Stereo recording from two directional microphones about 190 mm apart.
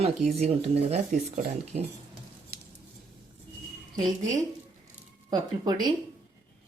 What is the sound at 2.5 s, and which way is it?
Scissors, 55° right (ahead or behind).